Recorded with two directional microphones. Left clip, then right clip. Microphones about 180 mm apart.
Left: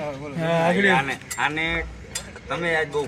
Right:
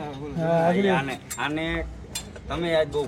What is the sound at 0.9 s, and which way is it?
Speech, 35° right (ahead or behind).